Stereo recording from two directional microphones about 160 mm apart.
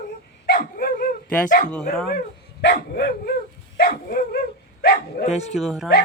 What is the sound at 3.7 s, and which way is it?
Dog, 70° left (ahead or behind).